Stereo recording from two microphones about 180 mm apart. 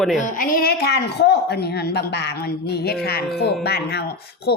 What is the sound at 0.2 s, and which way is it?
Speech, 50° left (ahead or behind).